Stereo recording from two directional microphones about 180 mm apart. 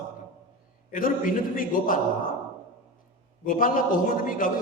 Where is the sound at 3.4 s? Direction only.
50° left (ahead or behind).